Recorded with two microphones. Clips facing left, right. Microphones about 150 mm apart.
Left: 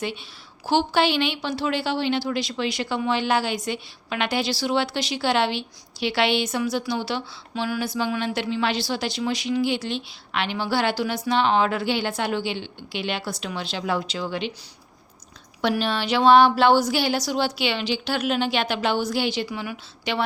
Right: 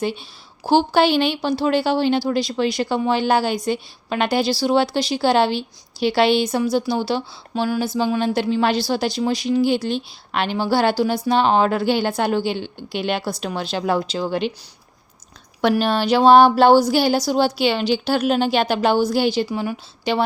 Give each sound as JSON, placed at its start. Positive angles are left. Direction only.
{"t": 0.0, "sound": "a woman's voice", "side_deg": -35}
{"t": 15.6, "sound": "a woman's voice", "side_deg": -45}